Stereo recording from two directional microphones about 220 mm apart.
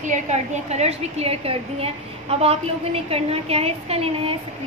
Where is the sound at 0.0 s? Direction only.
30° right (ahead or behind).